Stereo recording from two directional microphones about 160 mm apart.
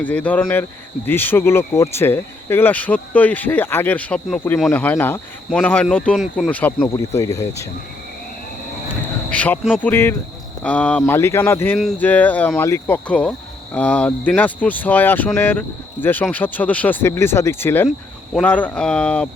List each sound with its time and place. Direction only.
0.0 s speech: 10° left (ahead or behind)
8.9 s a sound: 10° left (ahead or behind)
9.8 s speech: 10° left (ahead or behind)